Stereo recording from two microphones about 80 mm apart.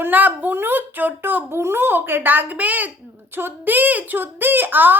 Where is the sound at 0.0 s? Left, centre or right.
Right.